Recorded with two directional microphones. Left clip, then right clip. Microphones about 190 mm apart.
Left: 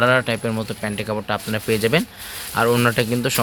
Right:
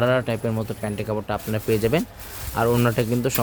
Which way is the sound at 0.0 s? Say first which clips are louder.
Left 4 dB; centre (ahead or behind).